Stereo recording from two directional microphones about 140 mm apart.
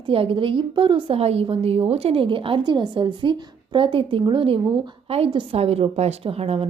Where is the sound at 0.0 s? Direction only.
40° right (ahead or behind).